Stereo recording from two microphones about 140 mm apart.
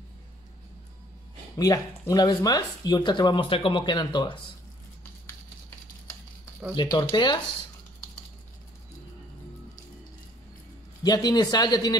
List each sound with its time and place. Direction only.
1.6 s speech: 25° left (ahead or behind)
6.7 s speech: 30° left (ahead or behind)
11.1 s speech: 30° left (ahead or behind)